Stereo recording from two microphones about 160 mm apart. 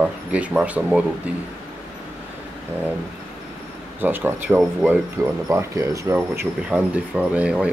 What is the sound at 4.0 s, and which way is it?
Speech, 10° right (ahead or behind).